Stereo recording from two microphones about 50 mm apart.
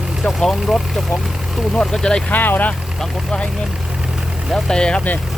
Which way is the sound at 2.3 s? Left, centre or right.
Left.